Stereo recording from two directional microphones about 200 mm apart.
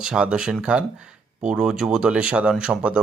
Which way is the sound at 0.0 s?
5° right (ahead or behind).